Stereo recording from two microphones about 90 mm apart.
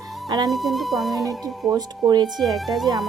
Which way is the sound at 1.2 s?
40° right (ahead or behind).